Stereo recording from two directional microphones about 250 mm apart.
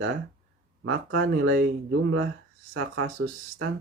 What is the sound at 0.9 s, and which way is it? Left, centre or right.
Speech, right.